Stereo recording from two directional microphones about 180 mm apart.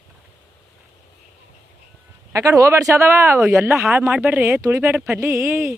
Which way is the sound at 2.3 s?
15° right (ahead or behind).